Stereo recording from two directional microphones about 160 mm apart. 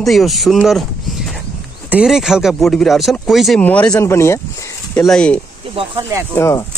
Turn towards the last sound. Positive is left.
turn(degrees=15)  # may be behind; listen again after turning